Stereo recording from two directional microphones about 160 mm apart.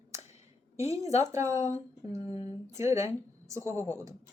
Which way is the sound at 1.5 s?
45° left (ahead or behind).